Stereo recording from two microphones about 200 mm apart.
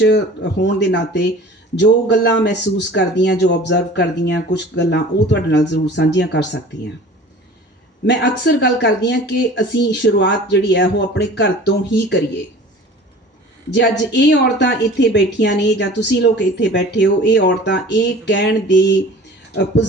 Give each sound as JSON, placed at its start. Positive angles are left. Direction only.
{"t": 0.0, "sound": "a woman's voice", "side_deg": 60}
{"t": 8.0, "sound": "a woman's voice", "side_deg": 60}
{"t": 13.7, "sound": "a woman's voice", "side_deg": 60}